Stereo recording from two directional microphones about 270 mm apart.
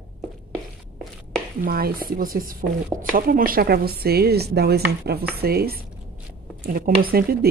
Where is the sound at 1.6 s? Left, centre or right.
Right.